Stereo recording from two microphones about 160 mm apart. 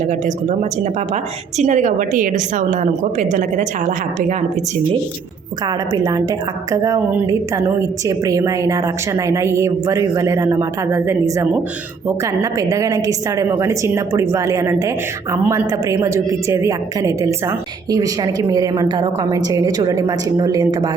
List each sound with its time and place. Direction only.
0.0 s a woman's voice: 45° right (ahead or behind)
5.6 s a woman's voice: 25° right (ahead or behind)